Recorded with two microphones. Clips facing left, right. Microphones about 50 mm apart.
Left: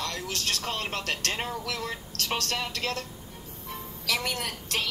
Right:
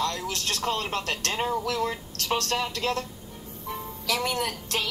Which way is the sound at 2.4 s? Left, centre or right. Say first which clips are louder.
Right 4 dB; right.